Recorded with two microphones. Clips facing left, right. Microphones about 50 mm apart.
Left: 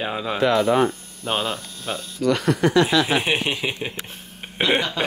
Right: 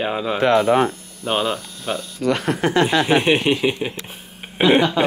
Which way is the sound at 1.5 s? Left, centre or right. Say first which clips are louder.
Right 4 dB; right.